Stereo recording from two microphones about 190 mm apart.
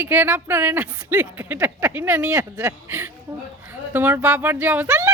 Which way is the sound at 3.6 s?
10° right (ahead or behind).